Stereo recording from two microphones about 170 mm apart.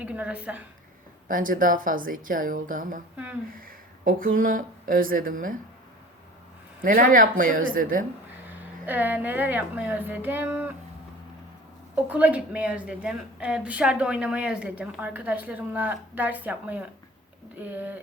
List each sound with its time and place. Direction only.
0.0 s a woman's voice: 5° right (ahead or behind)
1.3 s a woman's voice: 50° right (ahead or behind)
6.8 s a woman's voice: 55° right (ahead or behind)
8.4 s a woman's voice: 10° right (ahead or behind)
11.9 s a woman's voice: 10° right (ahead or behind)